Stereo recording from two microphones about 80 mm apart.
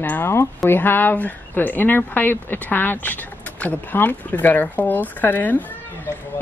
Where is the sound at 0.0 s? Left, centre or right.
Left.